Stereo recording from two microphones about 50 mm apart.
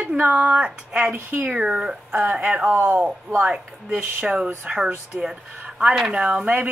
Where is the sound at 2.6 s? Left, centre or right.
Right.